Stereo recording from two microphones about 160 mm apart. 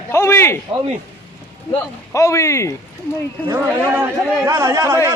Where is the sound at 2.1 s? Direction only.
20° left (ahead or behind).